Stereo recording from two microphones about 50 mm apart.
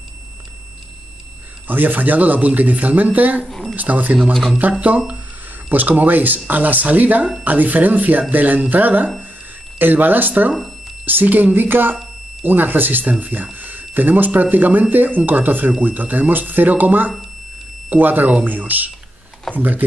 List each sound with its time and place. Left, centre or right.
1.7 s speech: right
3.4 s a sound: centre
3.7 s speech: right
4.3 s speech: centre
4.7 s speech: right
5.7 s speech: right